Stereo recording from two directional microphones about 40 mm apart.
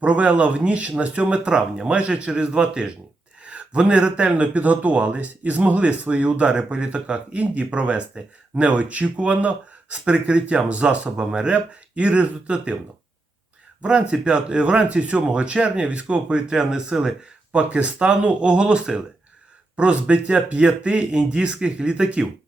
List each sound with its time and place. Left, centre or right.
0.0 s speech: right
11.5 s speech: right
13.8 s speech: right
16.5 s speech: centre
17.5 s speech: right